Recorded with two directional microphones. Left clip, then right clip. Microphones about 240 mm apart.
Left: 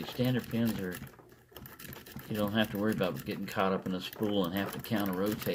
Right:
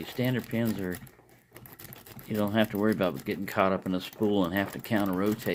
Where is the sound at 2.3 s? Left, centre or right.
Right.